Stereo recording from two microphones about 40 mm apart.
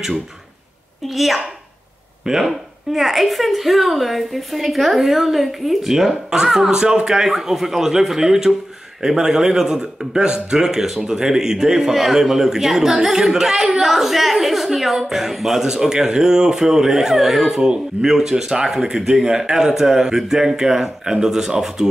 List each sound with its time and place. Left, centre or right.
1.0 s a woman's voice: centre